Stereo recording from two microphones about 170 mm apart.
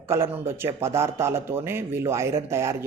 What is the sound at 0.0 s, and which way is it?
Speech, 15° right (ahead or behind).